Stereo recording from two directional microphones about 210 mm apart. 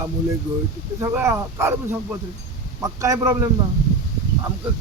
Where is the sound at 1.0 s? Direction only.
15° right (ahead or behind).